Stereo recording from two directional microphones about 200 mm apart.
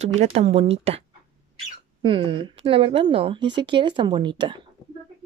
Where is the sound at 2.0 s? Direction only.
25° right (ahead or behind).